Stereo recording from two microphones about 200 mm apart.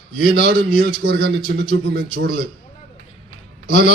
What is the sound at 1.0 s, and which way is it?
Speech, 55° right (ahead or behind).